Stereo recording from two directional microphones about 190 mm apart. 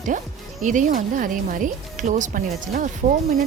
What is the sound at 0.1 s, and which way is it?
Speech, 40° right (ahead or behind).